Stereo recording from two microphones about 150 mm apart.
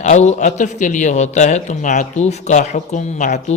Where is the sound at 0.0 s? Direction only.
50° left (ahead or behind).